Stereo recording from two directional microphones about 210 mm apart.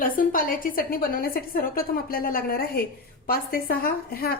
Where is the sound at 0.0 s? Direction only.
40° left (ahead or behind).